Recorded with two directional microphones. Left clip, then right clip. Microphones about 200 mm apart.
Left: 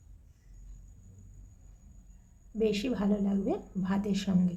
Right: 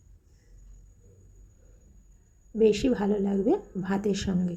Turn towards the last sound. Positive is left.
turn(degrees=-15)  # may be behind; listen again after turning